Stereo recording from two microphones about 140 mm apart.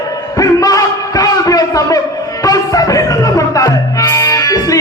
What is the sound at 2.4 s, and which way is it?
Music, 25° left (ahead or behind).